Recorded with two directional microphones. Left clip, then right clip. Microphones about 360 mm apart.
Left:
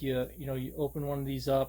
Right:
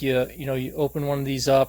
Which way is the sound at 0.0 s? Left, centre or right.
Right.